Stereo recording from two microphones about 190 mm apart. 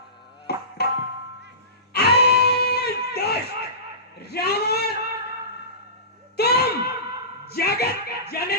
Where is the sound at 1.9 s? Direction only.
60° left (ahead or behind).